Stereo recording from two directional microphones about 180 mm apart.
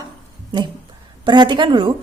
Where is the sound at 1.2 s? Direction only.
25° right (ahead or behind).